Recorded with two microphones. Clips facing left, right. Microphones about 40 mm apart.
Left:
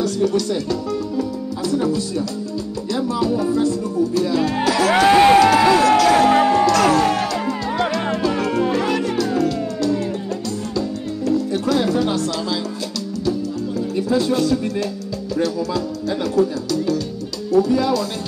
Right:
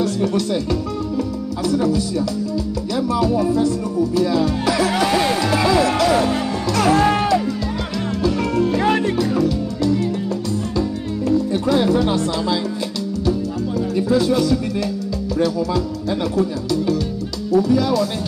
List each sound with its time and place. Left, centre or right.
0.0 s speech: right
4.6 s speech: left
5.0 s speech: left
5.6 s speech: left
6.6 s music: left
6.9 s speech: right
8.2 s music: left
8.7 s music: right
11.2 s music: right